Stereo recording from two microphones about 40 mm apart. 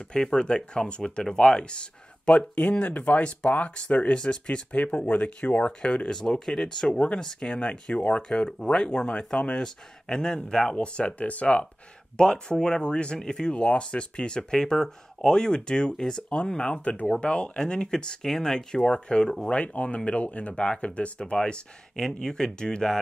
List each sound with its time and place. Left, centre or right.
0.1 s speech: left
6.1 s speech: centre
8.5 s speech: centre; by 11.6 s left
12.2 s speech: centre
16.6 s speech: left; by 19.5 s centre
19.5 s speech: left
21.9 s speech: centre